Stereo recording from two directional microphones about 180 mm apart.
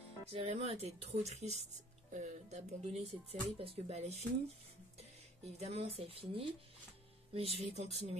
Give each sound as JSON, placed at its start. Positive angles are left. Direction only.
{"t": 0.3, "sound": "speech", "side_deg": -35}
{"t": 5.4, "sound": "speech", "side_deg": -35}